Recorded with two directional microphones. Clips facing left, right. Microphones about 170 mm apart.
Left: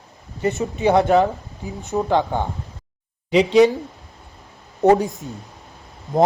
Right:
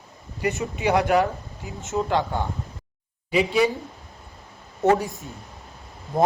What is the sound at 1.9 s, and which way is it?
Speech, 15° left (ahead or behind).